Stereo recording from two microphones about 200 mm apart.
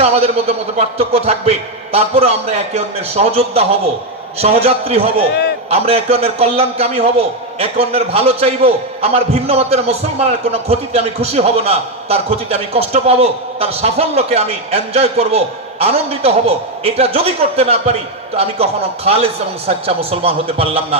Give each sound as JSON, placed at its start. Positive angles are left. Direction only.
{"t": 0.0, "sound": "a man's voice", "side_deg": -30}
{"t": 5.3, "sound": "a man's voice", "side_deg": 55}
{"t": 5.7, "sound": "a man's voice", "side_deg": -30}